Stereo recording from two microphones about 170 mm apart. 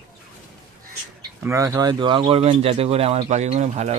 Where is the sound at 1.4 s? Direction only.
15° right (ahead or behind); by 3.9 s 40° right (ahead or behind).